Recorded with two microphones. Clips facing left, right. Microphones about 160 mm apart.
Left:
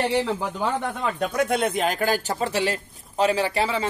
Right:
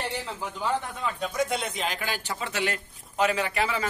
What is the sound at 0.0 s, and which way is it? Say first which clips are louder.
Speech: left 10 dB; 80° left.